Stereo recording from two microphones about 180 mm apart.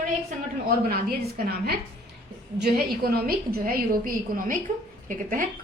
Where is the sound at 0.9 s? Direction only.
60° right (ahead or behind).